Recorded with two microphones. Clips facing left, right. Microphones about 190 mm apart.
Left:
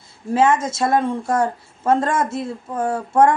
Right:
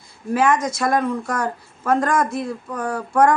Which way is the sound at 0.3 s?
25° left (ahead or behind).